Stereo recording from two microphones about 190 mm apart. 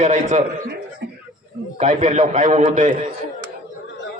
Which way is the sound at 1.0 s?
60° right (ahead or behind).